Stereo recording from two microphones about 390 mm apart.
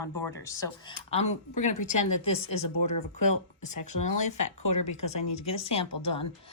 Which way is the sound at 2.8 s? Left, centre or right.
Left.